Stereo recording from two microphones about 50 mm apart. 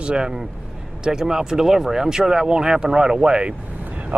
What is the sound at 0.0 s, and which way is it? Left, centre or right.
Speech, centre.